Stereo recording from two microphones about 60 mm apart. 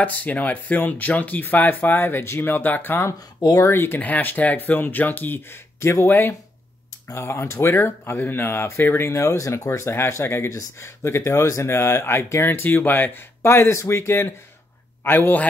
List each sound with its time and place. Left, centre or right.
0.0 s speech: left
4.0 s speech: left
5.8 s speech: left
6.0 s speech: left
12.4 s speech: left
13.4 s speech: left